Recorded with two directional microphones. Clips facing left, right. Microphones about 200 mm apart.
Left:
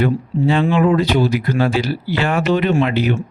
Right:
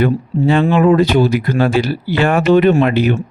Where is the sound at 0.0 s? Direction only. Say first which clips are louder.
Right 2 dB; 55° right (ahead or behind).